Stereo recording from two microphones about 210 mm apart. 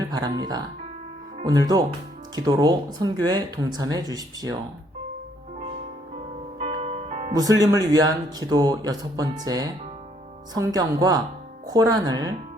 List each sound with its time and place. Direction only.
0.1 s speech: 20° right (ahead or behind)
6.6 s music: 30° right (ahead or behind)
7.6 s speech: 15° right (ahead or behind)